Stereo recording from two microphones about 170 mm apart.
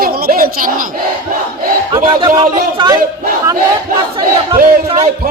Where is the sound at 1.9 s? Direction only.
30° right (ahead or behind).